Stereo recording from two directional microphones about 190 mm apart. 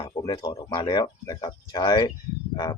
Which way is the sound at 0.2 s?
20° left (ahead or behind).